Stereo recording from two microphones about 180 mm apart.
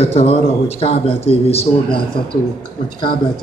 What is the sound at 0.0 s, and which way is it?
Speech, 35° left (ahead or behind).